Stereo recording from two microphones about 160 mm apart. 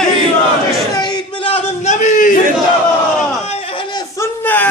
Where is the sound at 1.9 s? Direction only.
50° left (ahead or behind).